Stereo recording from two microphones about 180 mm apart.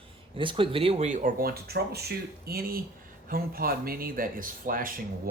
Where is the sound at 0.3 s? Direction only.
30° right (ahead or behind).